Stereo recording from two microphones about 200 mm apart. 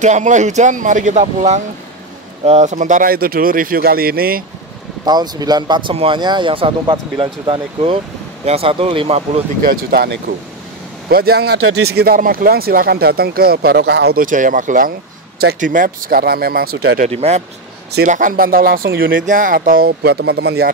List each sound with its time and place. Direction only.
0.0 s speech: 35° right (ahead or behind)
5.0 s speech: 20° right (ahead or behind)
9.6 s speech: 45° right (ahead or behind)
11.5 s speech: 90° right
11.9 s speech: 50° right (ahead or behind)
17.1 s speech: 30° right (ahead or behind)
17.9 s speech: 40° right (ahead or behind)